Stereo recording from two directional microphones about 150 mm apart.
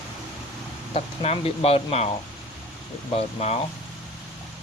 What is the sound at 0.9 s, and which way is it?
Speech, 40° left (ahead or behind).